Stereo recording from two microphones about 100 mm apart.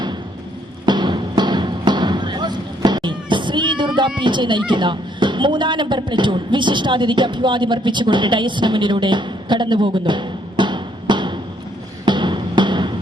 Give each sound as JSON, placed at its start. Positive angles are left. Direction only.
{"t": 0.9, "sound": "music", "side_deg": -50}
{"t": 4.2, "sound": "speech", "side_deg": -50}
{"t": 12.0, "sound": "music", "side_deg": -50}